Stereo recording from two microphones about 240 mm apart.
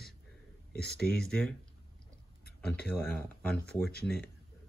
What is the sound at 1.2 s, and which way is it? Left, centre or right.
Speech, centre.